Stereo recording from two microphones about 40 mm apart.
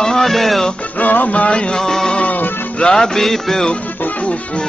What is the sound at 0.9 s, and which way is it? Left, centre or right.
Music, left.